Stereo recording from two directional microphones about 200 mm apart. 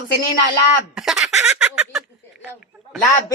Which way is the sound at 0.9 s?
Centre (ahead or behind).